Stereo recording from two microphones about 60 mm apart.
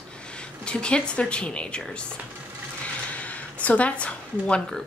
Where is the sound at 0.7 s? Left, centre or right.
Centre.